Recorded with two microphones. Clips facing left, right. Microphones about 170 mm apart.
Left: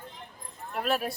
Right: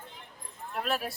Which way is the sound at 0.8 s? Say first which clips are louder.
Left 3 dB; centre (ahead or behind).